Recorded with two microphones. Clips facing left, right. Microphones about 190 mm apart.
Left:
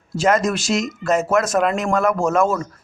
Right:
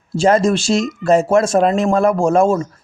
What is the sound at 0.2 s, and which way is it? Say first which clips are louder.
Speech: right 4 dB; 30° right (ahead or behind).